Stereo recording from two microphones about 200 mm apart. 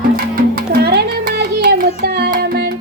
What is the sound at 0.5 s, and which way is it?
Child singing, 50° right (ahead or behind).